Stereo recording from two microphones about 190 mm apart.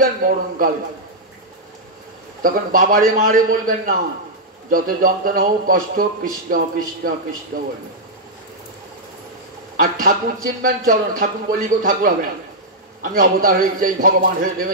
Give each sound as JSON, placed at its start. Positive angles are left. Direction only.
{"t": 0.0, "sound": "a man's voice", "side_deg": -50}
{"t": 2.4, "sound": "speech", "side_deg": -45}
{"t": 9.8, "sound": "speech", "side_deg": -50}